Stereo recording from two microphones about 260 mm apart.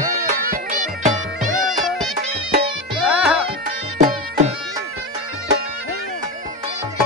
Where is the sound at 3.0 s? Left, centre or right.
Centre.